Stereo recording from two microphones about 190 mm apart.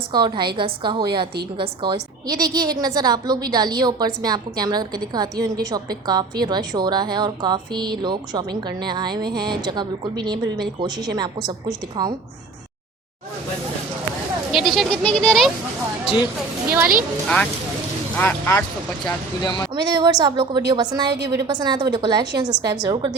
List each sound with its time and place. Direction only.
0.1 s a woman's voice: 25° right (ahead or behind)
14.5 s speech: centre (ahead or behind)
17.2 s speech: 5° left (ahead or behind)
19.4 s speech: 25° left (ahead or behind)
19.7 s a woman's voice: 20° right (ahead or behind)